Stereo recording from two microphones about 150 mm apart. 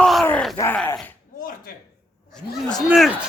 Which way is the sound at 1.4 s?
70° left (ahead or behind).